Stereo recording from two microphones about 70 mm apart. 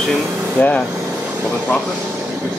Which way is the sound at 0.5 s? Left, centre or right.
Left.